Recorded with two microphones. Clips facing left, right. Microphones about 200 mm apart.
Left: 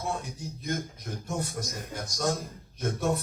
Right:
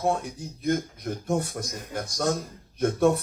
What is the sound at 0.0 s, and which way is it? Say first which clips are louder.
A man's voice: right 7 dB; 55° right (ahead or behind).